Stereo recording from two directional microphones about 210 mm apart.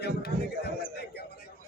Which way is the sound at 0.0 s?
50° left (ahead or behind).